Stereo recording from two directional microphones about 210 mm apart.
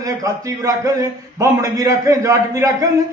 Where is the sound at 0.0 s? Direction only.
15° right (ahead or behind).